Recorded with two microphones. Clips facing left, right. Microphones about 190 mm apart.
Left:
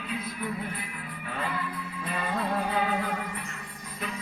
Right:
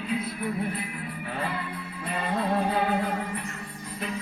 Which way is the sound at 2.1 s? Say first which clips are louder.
Right 3 dB; 30° right (ahead or behind).